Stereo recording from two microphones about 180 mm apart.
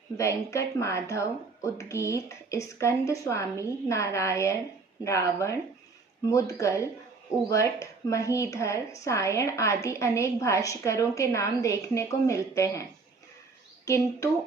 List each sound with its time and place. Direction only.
0.2 s a woman's voice: 15° left (ahead or behind)
13.8 s a woman's voice: 15° left (ahead or behind)